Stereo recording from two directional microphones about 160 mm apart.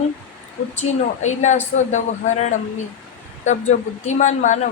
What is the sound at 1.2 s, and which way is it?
Speech, 45° left (ahead or behind).